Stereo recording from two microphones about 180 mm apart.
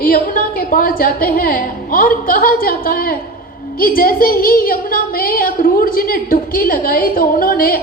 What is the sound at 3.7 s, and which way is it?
A woman's voice, 55° left (ahead or behind).